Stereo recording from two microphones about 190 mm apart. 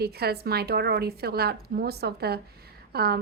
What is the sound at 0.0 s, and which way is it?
A woman's voice, 55° right (ahead or behind).